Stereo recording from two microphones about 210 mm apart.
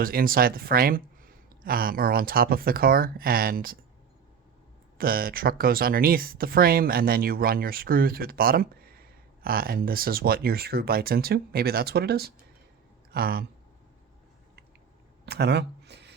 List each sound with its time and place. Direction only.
0.0 s speech: 45° right (ahead or behind)
4.9 s speech: 45° right (ahead or behind)
15.3 s a sound: 50° right (ahead or behind)